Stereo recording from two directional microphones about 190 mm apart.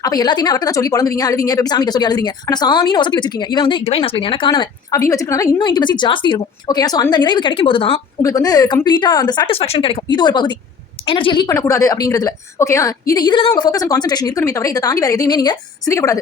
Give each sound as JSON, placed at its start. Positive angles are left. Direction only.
{"t": 0.0, "sound": "a woman's voice", "side_deg": 20}